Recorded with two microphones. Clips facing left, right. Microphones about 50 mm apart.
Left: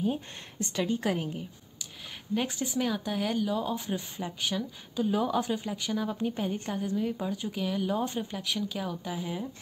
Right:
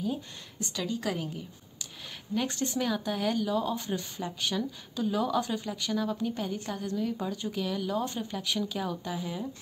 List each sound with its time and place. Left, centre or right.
0.0 s speech: left
2.3 s speech: centre